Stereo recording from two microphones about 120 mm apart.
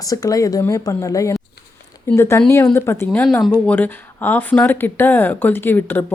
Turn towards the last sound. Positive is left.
turn(degrees=15)  # may be behind; listen again after turning